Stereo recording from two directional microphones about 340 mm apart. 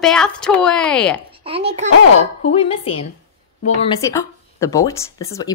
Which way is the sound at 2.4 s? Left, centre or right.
Centre.